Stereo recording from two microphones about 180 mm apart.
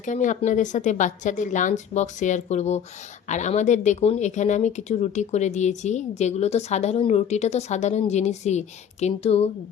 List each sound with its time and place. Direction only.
0.0 s a woman's voice: 45° left (ahead or behind)